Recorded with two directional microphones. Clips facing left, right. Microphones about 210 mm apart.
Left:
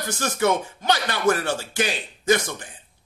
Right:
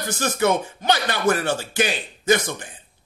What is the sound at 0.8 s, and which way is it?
Speech, 20° right (ahead or behind).